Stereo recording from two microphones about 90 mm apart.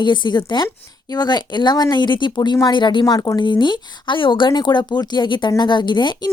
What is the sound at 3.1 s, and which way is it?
Speech, 40° left (ahead or behind).